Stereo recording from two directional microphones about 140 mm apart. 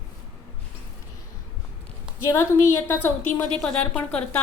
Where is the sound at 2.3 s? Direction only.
20° left (ahead or behind).